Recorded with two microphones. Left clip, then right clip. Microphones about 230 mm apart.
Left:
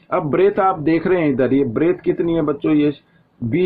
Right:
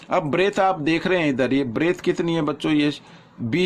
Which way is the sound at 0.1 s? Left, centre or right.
Right.